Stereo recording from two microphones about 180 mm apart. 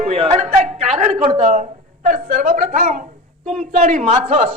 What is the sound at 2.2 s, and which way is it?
A woman's voice, 55° right (ahead or behind).